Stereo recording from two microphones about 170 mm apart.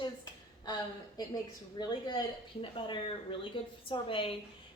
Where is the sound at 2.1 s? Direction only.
30° left (ahead or behind).